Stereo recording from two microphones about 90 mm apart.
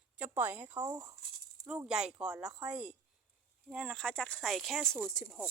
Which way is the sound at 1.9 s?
5° right (ahead or behind).